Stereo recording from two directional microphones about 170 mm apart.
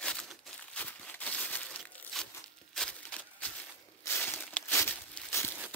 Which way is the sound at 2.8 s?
5° left (ahead or behind).